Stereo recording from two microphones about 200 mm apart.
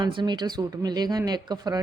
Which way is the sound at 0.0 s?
25° right (ahead or behind).